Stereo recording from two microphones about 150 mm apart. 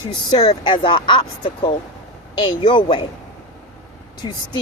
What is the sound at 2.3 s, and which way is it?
Speech, 30° left (ahead or behind).